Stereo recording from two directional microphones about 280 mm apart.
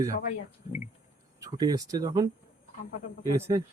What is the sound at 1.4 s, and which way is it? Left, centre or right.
Speech, centre.